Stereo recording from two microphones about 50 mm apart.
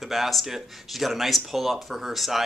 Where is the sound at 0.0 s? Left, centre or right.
Centre.